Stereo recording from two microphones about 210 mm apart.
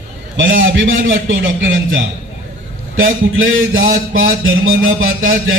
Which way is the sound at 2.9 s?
70° right (ahead or behind).